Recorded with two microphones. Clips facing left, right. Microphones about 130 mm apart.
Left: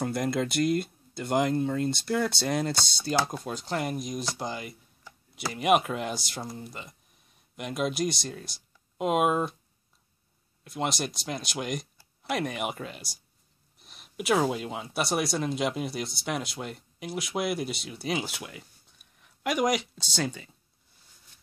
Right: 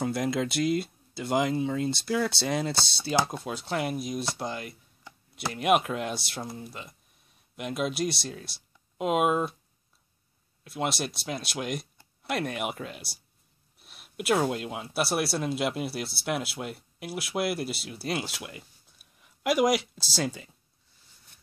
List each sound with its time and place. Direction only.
0.0 s speech: centre (ahead or behind)
10.6 s speech: centre (ahead or behind)